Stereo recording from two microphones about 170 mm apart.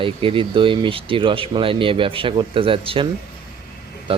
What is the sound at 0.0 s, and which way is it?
Speech, 30° right (ahead or behind).